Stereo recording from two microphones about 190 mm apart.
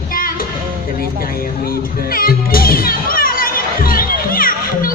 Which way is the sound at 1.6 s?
50° left (ahead or behind).